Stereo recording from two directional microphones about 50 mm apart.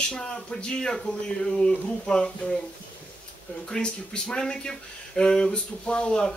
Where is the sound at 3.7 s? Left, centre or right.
Centre.